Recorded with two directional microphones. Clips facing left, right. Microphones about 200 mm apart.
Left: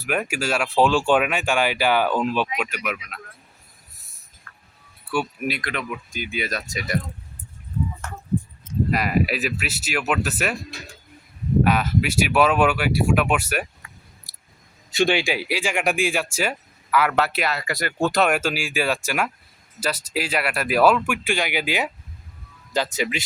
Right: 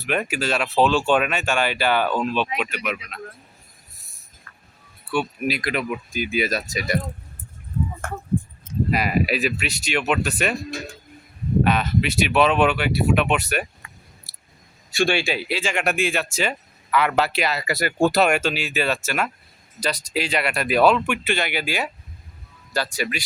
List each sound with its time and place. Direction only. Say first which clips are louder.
0.0 s speech: right 1 dB; 5° left (ahead or behind)
4.5 s a sound: left 1 dB; 30° right (ahead or behind)
5.1 s speech: right 1 dB; centre (ahead or behind)
8.0 s a sound: right 5 dB; 50° right (ahead or behind)
8.9 s speech: right 1 dB; centre (ahead or behind)
11.6 s speech: even; 5° left (ahead or behind)
14.8 s speech: left 1 dB; 20° left (ahead or behind)